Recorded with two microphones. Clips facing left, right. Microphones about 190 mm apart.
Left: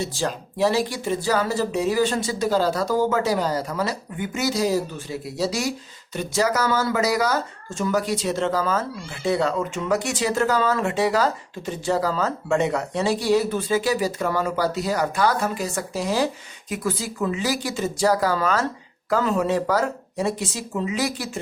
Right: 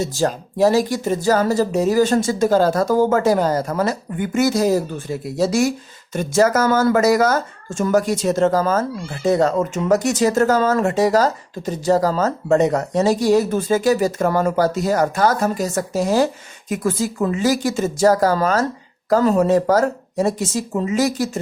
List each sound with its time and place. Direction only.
0.0 s speech: 40° right (ahead or behind)